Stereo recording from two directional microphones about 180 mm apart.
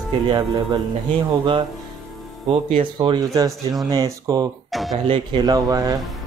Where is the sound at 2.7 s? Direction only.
30° right (ahead or behind).